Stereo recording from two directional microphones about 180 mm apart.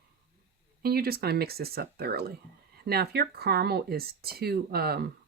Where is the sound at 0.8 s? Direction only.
60° right (ahead or behind).